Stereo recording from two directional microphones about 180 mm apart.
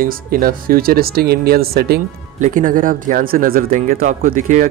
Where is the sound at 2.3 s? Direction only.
45° right (ahead or behind).